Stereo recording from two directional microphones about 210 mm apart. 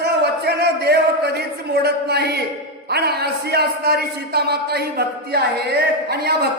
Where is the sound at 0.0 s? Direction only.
50° right (ahead or behind).